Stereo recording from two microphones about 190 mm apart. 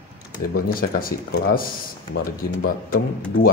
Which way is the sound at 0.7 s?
50° left (ahead or behind).